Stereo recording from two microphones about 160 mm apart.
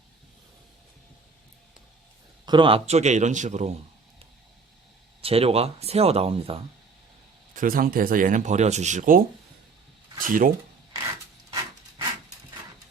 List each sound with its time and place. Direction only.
2.5 s a man's voice: 30° right (ahead or behind)
5.2 s speech: 40° right (ahead or behind)
7.5 s speech: 60° right (ahead or behind)